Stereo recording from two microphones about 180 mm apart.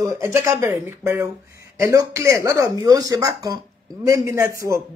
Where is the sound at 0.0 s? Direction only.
15° right (ahead or behind).